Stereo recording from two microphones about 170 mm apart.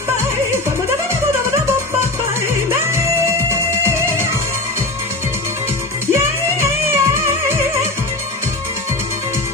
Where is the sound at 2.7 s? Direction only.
15° right (ahead or behind).